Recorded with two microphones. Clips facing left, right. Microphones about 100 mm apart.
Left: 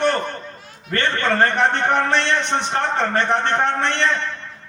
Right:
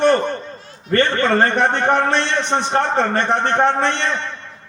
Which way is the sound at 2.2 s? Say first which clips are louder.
Right 1 dB; 25° right (ahead or behind).